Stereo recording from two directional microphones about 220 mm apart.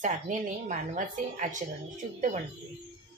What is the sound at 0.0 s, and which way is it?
A woman's voice, 35° right (ahead or behind).